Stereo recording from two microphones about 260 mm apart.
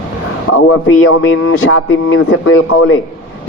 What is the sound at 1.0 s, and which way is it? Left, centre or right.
A man's voice, left.